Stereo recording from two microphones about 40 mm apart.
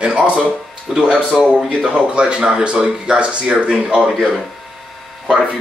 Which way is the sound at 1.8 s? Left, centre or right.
Right.